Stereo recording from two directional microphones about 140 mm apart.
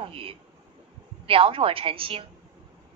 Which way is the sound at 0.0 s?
40° right (ahead or behind).